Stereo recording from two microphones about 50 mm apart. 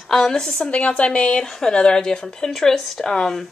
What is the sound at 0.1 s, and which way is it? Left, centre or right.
Speech, centre.